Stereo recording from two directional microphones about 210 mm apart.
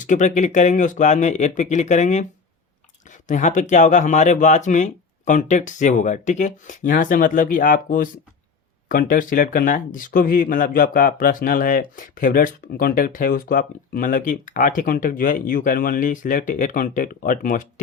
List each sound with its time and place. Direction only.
0.0 s speech: 35° left (ahead or behind)